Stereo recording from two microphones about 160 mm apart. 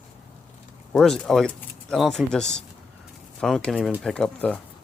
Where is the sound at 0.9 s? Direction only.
5° left (ahead or behind).